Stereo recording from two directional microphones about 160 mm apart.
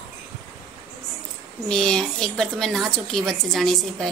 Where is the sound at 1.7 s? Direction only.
5° left (ahead or behind).